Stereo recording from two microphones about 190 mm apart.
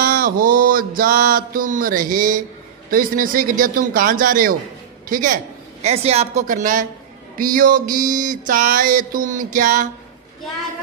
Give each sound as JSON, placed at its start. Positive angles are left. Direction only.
{"t": 0.0, "sound": "mantra", "side_deg": -50}
{"t": 5.0, "sound": "a woman's voice", "side_deg": -45}
{"t": 7.3, "sound": "mantra", "side_deg": -45}